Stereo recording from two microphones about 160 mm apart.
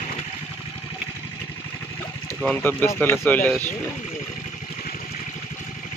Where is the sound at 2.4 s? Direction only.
10° left (ahead or behind).